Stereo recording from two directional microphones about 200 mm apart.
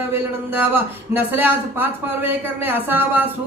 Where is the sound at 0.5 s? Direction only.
10° right (ahead or behind).